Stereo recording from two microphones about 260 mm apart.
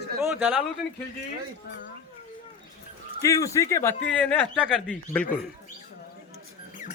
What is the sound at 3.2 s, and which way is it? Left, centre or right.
Speech, centre.